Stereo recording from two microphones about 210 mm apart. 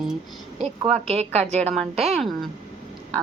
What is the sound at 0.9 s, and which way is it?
Speech, 30° right (ahead or behind).